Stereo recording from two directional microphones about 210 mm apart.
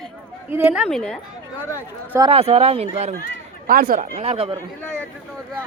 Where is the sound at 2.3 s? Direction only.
30° right (ahead or behind).